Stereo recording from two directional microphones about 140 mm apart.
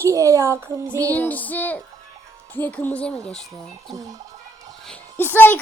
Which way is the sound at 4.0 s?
25° right (ahead or behind).